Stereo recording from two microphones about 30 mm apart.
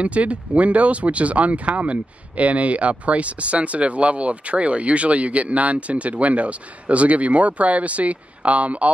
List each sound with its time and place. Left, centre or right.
0.0 s speech: right